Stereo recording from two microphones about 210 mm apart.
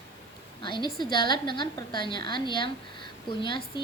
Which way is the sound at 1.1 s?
20° left (ahead or behind).